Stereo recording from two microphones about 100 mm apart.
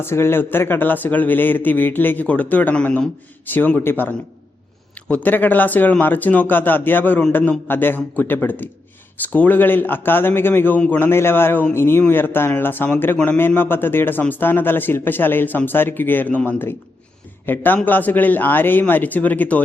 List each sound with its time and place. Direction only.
0.0 s a man's voice: 25° left (ahead or behind)